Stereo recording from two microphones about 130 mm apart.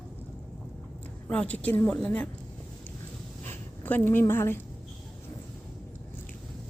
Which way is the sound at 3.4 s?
15° left (ahead or behind).